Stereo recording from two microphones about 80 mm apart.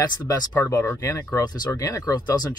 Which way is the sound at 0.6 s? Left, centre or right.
Left.